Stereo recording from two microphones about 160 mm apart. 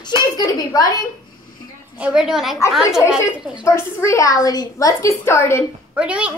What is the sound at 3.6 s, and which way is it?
A woman's voice, 20° left (ahead or behind).